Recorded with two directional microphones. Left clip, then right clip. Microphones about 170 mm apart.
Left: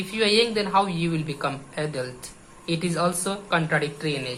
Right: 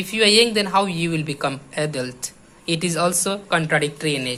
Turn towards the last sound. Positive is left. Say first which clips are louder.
# right 5 dB
turn(degrees=-45)  # may be behind; listen again after turning